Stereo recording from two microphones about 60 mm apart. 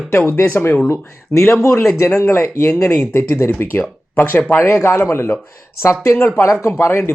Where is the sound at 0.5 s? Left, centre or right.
Left.